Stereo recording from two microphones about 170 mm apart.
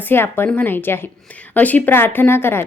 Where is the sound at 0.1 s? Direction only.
15° left (ahead or behind).